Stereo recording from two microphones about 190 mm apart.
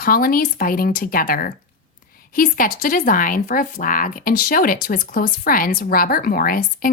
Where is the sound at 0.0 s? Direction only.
50° left (ahead or behind).